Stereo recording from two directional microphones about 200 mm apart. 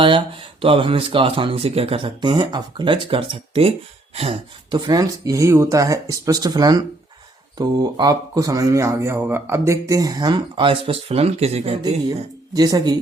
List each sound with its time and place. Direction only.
0.0 s speech: 25° right (ahead or behind)
12.5 s speech: 20° right (ahead or behind)